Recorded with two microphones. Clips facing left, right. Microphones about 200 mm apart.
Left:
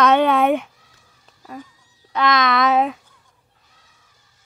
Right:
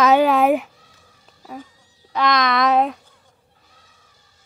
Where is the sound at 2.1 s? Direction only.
Centre (ahead or behind).